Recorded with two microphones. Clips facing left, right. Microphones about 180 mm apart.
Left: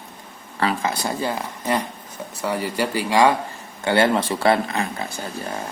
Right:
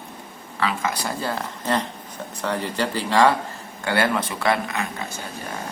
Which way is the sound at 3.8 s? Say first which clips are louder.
Left 4 dB; 25° left (ahead or behind).